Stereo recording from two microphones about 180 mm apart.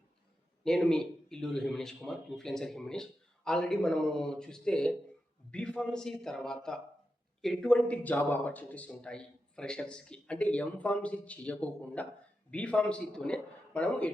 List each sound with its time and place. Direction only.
0.6 s speech: 5° left (ahead or behind)